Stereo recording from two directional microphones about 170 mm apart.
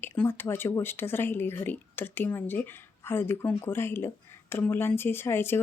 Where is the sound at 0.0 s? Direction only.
15° left (ahead or behind).